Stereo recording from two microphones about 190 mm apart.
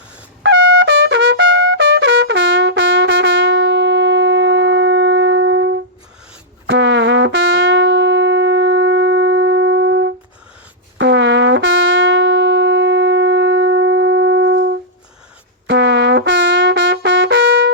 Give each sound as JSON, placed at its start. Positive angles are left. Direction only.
{"t": 0.4, "sound": "trumpet", "side_deg": -75}
{"t": 6.7, "sound": "music", "side_deg": -75}
{"t": 15.6, "sound": "brass instrument", "side_deg": -70}